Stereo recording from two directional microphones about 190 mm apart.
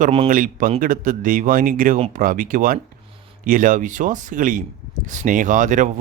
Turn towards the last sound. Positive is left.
turn(degrees=-40)  # may be behind; listen again after turning